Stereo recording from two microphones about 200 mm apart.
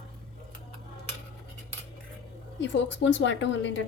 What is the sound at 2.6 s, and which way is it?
A woman's voice, 65° left (ahead or behind).